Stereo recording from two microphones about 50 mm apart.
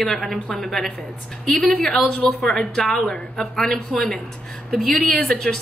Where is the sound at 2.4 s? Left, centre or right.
Centre.